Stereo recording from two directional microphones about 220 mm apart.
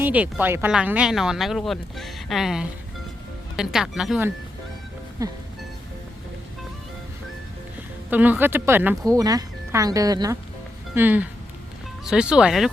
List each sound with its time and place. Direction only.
0.0 s speech: 5° right (ahead or behind)
5.2 s speech: 15° right (ahead or behind)
8.1 s speech: 10° right (ahead or behind)